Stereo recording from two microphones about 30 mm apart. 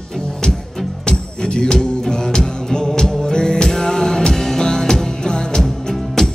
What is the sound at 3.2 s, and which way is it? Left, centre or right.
Music, left.